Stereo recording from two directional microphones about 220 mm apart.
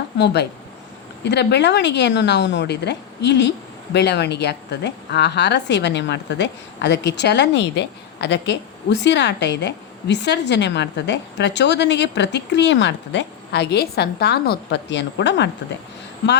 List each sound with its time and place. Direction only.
1.2 s a woman's voice: 50° left (ahead or behind)